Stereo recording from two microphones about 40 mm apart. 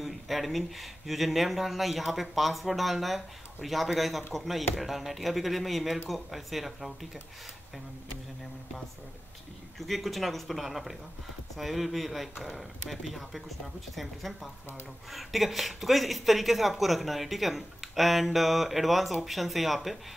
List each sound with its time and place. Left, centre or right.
0.0 s speech: centre
9.8 s speech: centre